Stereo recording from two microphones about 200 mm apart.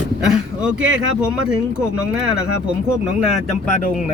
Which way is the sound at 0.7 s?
70° right (ahead or behind).